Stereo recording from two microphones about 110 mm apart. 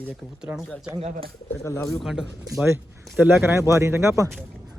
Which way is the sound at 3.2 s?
20° right (ahead or behind).